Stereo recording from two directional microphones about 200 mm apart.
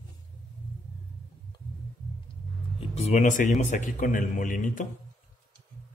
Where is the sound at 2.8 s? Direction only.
30° left (ahead or behind).